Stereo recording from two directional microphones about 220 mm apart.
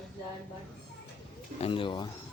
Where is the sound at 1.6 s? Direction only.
25° left (ahead or behind).